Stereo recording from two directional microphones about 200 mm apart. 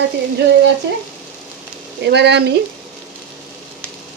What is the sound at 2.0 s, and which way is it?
Speech, 55° right (ahead or behind).